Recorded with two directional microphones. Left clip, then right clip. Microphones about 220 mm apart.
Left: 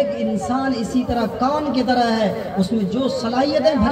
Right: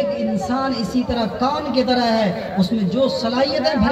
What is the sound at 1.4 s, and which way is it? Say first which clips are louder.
A man's voice: right 2 dB; 45° right (ahead or behind).